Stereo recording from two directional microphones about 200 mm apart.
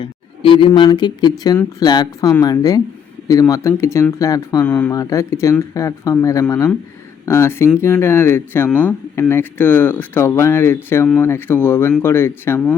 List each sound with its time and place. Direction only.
0.0 s speech: 25° left (ahead or behind); by 12.7 s 10° left (ahead or behind)